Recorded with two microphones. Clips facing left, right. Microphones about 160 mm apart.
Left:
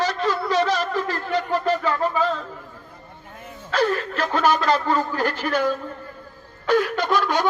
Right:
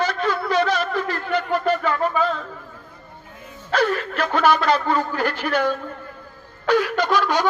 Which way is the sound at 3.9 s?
35° left (ahead or behind).